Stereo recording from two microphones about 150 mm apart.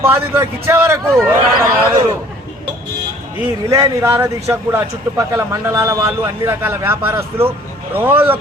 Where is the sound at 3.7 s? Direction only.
25° right (ahead or behind).